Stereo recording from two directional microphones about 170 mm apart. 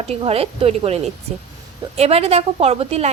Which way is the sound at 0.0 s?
35° right (ahead or behind).